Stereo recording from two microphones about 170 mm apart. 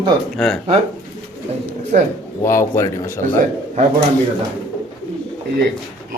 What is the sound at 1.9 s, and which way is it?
Speech, 50° right (ahead or behind).